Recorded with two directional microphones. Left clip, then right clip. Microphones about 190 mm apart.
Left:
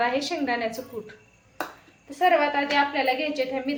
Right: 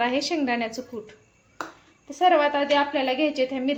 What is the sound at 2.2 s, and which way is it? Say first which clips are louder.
A woman's voice: right 1 dB; 40° right (ahead or behind).